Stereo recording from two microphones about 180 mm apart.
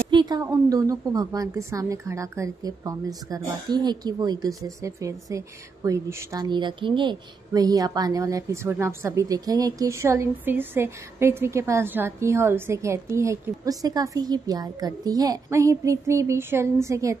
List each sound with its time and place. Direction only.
0.1 s a woman's voice: 25° right (ahead or behind)